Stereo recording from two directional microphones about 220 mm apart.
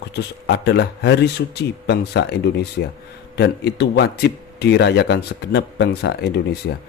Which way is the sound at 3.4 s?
50° left (ahead or behind).